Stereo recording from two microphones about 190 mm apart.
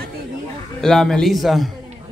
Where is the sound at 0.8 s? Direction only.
5° left (ahead or behind).